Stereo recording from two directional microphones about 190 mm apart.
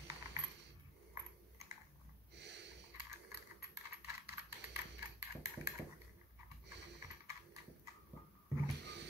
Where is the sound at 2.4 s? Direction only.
65° right (ahead or behind).